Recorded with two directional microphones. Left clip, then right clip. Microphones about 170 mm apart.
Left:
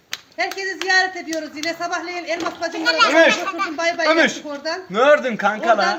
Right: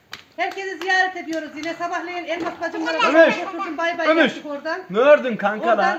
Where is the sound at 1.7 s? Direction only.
25° left (ahead or behind).